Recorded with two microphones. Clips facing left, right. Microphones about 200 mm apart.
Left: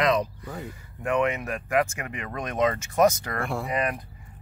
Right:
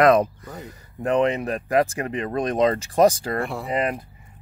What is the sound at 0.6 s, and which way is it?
Speech, 35° right (ahead or behind).